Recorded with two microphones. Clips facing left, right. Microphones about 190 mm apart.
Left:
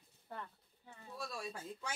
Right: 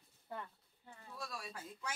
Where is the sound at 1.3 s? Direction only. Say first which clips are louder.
Left 4 dB; 25° left (ahead or behind).